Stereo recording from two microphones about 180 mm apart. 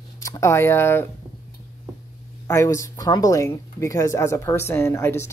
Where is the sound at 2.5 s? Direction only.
15° left (ahead or behind).